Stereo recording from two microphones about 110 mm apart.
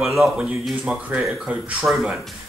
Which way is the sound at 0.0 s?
Centre (ahead or behind).